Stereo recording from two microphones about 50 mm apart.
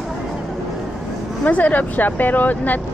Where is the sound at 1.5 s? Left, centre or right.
Left.